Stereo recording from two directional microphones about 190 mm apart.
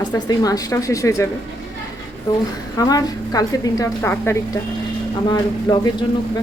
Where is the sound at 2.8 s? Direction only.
20° left (ahead or behind).